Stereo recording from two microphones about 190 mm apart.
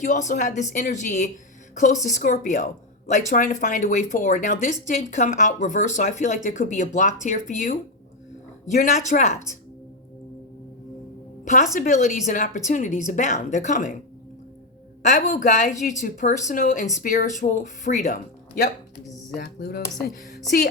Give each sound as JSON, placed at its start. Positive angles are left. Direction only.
{"t": 0.0, "sound": "a woman's voice", "side_deg": 40}
{"t": 11.8, "sound": "a woman's voice", "side_deg": 40}
{"t": 15.0, "sound": "a woman's voice", "side_deg": 40}
{"t": 19.4, "sound": "speech", "side_deg": 55}